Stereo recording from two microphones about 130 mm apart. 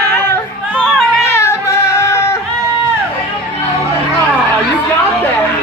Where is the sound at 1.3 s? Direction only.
20° left (ahead or behind).